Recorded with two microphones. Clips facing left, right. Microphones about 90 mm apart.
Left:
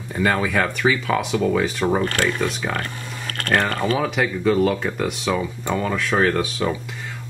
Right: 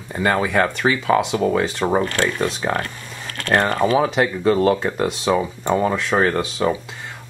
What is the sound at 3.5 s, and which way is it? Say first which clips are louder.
Speech: right 3 dB; 20° right (ahead or behind).